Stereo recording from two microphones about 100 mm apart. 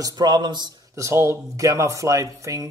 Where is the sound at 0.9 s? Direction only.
30° right (ahead or behind).